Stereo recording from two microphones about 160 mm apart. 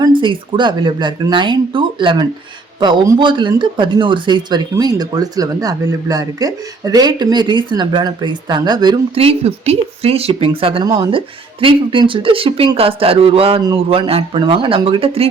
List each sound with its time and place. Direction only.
0.0 s speech: 30° right (ahead or behind)